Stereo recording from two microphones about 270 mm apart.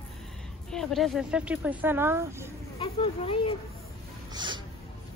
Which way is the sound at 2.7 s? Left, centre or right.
Left.